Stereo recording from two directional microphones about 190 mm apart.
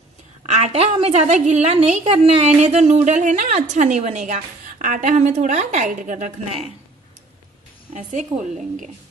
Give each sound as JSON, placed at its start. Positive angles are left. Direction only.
{"t": 0.5, "sound": "a woman's voice", "side_deg": -35}
{"t": 7.9, "sound": "a woman's voice", "side_deg": -40}